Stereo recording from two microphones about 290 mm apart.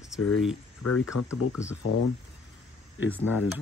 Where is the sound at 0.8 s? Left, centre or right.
Left.